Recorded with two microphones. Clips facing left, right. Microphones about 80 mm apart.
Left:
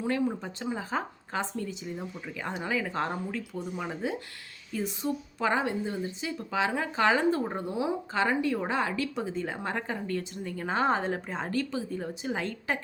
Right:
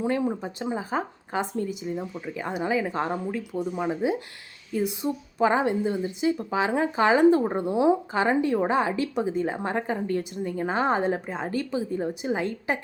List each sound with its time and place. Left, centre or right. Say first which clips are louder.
0.0 s a woman's voice: right 3 dB; centre